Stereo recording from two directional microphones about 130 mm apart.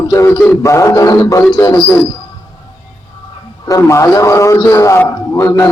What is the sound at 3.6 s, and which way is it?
A man's voice, 25° left (ahead or behind).